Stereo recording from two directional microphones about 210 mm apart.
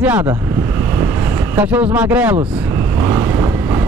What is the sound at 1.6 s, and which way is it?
Speech, 5° right (ahead or behind).